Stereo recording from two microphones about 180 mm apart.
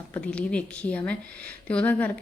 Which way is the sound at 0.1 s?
5° left (ahead or behind).